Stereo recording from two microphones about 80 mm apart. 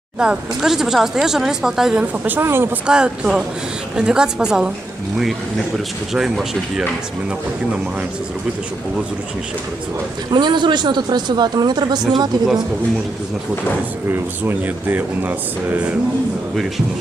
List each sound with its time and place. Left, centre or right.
0.2 s speech: centre
2.1 s speech: right
2.8 s speech: centre
5.7 s speech: centre
10.3 s speech: right
14.1 s speech: right